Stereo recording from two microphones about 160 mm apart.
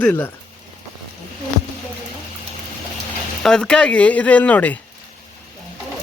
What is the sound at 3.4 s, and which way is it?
Speech, 5° left (ahead or behind).